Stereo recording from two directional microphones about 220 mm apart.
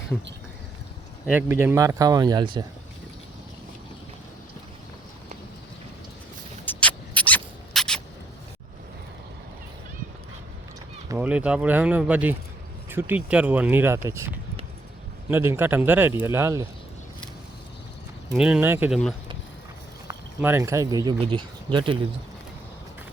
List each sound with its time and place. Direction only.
1.3 s speech: 10° right (ahead or behind)
6.7 s rodents: 5° left (ahead or behind)
11.1 s speech: 5° right (ahead or behind)
18.3 s speech: 5° right (ahead or behind)
20.1 s speech: 10° right (ahead or behind)